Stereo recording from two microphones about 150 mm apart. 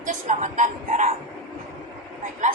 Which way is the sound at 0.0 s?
55° right (ahead or behind).